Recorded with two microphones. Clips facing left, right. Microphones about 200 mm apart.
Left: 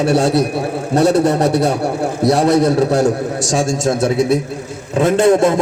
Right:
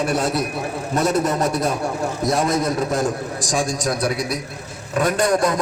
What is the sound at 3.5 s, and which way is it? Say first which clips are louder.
A man's voice: left 5 dB; 25° left (ahead or behind).